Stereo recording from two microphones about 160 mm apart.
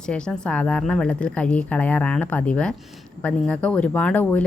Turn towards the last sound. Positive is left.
turn(degrees=10)  # may be behind; listen again after turning